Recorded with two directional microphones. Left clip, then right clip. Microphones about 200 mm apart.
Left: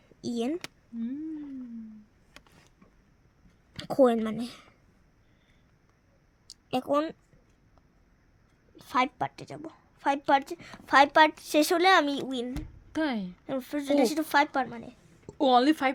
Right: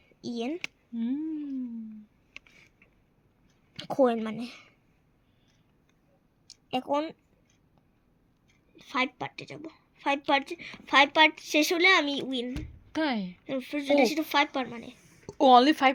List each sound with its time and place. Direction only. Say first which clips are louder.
0.3 s speech: left 2 dB; 35° left (ahead or behind)
0.9 s a sound: right 4 dB; 15° right (ahead or behind)
3.8 s speech: left 2 dB; 30° left (ahead or behind)
6.7 s speech: left 2 dB; 30° left (ahead or behind)
8.7 s a woman's voice: left 3 dB; 30° left (ahead or behind)
12.9 s a woman's voice: right 1 dB; 10° left (ahead or behind)
15.3 s speech: right 4 dB; 5° left (ahead or behind)